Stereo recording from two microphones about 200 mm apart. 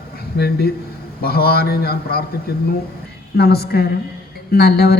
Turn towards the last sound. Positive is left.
turn(degrees=50)  # may be behind; listen again after turning